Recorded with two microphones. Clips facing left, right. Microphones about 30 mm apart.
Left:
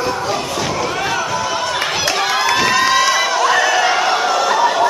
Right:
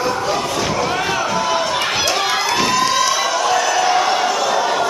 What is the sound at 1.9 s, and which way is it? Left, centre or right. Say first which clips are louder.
Crowd: even; centre.